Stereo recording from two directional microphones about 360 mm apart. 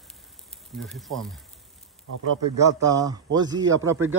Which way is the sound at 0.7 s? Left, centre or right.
Centre.